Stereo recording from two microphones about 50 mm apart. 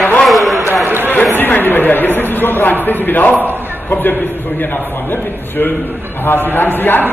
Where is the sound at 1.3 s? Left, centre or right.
Left.